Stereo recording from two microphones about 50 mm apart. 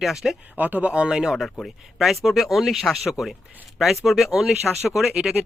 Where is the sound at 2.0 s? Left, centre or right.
Centre.